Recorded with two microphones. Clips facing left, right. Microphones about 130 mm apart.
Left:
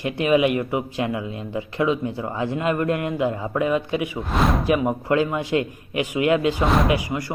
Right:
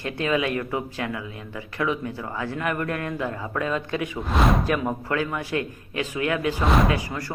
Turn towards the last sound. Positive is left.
turn(degrees=15)  # may be behind; listen again after turning